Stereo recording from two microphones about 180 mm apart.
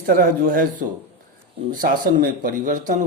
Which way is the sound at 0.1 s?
50° right (ahead or behind).